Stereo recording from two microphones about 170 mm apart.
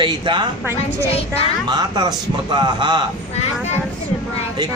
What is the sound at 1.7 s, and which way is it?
A man's voice, 25° right (ahead or behind).